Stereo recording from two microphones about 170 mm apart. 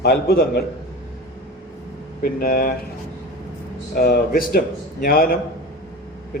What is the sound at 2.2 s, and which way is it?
Speech, 60° left (ahead or behind).